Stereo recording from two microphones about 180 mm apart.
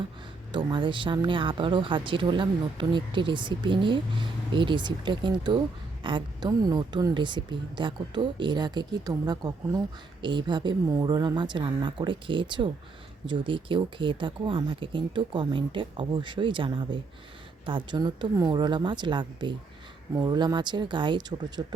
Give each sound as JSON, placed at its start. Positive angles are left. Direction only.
{"t": 0.5, "sound": "a woman's voice", "side_deg": -25}